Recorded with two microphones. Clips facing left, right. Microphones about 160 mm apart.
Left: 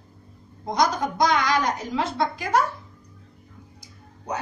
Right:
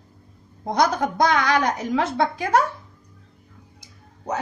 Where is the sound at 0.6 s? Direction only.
55° right (ahead or behind).